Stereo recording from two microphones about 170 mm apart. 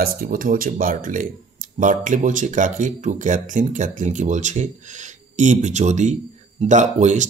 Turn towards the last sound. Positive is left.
turn(degrees=-45)  # may be behind; listen again after turning